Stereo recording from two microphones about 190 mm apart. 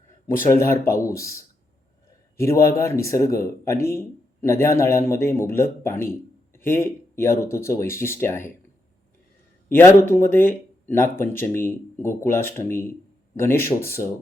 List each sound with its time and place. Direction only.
0.5 s speech: 15° left (ahead or behind)
9.6 s speech: 10° left (ahead or behind)